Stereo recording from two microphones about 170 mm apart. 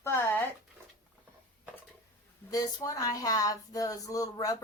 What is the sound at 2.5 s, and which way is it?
Speech, 20° left (ahead or behind).